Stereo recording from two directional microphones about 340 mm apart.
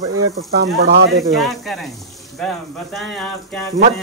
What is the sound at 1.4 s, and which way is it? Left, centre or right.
Speech, centre.